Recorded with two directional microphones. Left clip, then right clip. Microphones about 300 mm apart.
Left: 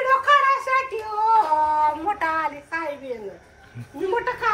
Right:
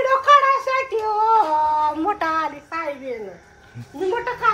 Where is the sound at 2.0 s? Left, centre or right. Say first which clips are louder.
Right 2 dB; right.